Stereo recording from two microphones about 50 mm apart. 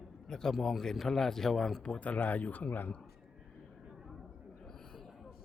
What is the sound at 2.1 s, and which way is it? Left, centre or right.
Speech, left.